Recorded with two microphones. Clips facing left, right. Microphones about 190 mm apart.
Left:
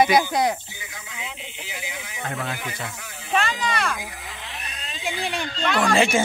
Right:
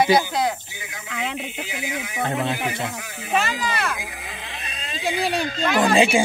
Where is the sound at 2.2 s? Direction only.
25° right (ahead or behind).